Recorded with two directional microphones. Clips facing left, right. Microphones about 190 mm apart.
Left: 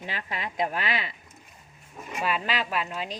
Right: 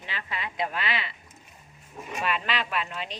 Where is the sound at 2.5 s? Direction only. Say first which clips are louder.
Left 1 dB; 40° left (ahead or behind).